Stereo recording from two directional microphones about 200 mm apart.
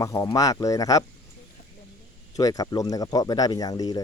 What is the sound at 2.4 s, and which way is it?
Speech, 20° left (ahead or behind).